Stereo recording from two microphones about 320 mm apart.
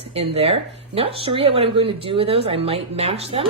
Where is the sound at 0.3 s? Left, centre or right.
Centre.